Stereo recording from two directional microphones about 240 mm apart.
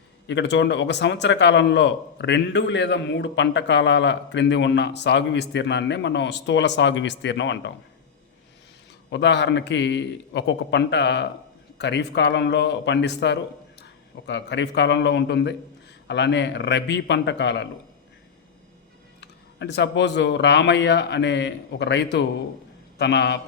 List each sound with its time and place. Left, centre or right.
0.3 s a man's voice: left
9.0 s a man's voice: left
19.2 s a man's voice: left